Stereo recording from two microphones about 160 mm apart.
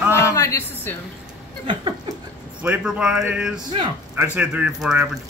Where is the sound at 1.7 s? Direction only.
30° right (ahead or behind).